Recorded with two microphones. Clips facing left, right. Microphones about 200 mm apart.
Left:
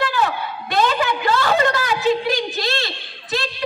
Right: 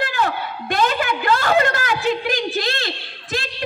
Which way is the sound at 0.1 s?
50° right (ahead or behind).